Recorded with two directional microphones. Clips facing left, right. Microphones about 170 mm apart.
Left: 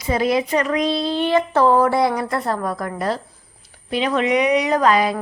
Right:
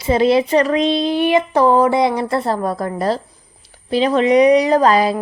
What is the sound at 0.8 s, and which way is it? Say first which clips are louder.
A woman's voice: right 4 dB; 20° right (ahead or behind).